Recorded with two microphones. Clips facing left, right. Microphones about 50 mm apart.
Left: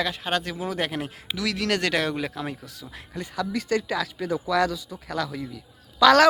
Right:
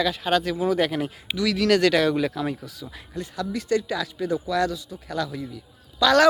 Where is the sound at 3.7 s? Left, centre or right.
Left.